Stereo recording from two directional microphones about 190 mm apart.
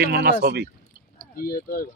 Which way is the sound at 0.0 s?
55° right (ahead or behind).